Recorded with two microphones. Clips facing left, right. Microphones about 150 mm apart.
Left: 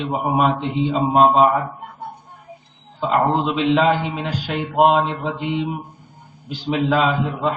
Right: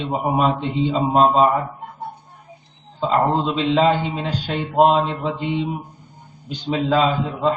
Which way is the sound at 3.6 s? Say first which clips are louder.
Even; 35° right (ahead or behind).